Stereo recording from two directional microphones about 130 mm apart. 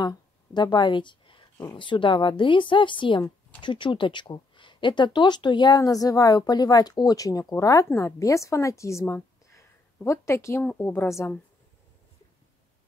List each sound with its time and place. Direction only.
0.6 s a woman's voice: 35° left (ahead or behind); by 11.3 s 20° left (ahead or behind)